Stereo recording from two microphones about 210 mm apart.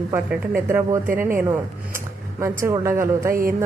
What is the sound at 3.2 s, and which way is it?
Speech, 40° right (ahead or behind).